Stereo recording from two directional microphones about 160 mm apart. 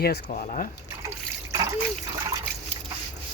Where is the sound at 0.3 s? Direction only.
55° left (ahead or behind).